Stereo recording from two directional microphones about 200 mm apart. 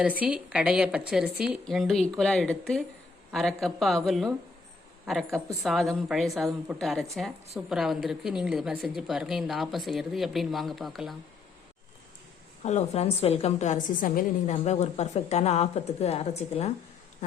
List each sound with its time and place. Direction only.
0.0 s a woman's voice: 5° right (ahead or behind)
12.6 s a woman's voice: 35° left (ahead or behind)